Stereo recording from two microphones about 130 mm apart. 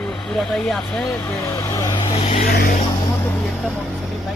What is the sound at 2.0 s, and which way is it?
Vehicle, 35° left (ahead or behind).